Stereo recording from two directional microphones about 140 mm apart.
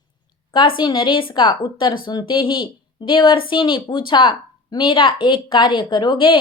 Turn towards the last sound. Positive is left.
turn(degrees=35)  # may be behind; listen again after turning